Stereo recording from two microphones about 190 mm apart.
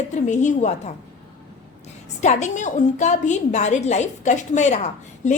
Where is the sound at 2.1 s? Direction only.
40° left (ahead or behind).